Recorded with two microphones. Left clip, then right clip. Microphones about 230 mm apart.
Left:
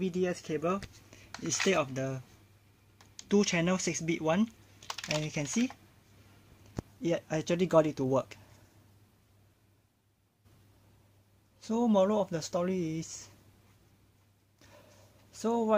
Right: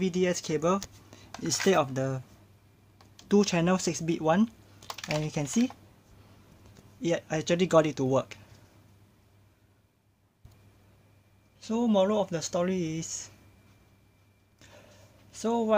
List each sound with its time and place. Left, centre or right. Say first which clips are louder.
0.0 s speech: right 5 dB; centre
3.3 s speech: right 3 dB; centre
7.0 s speech: right 3 dB; centre
11.6 s speech: right 2 dB; centre
15.3 s speech: right 2 dB; centre